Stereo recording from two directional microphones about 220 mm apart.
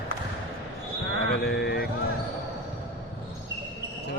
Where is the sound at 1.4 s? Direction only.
45° left (ahead or behind).